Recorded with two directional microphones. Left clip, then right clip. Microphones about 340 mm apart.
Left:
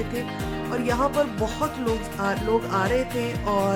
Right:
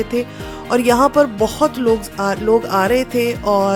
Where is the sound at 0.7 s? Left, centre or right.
Right.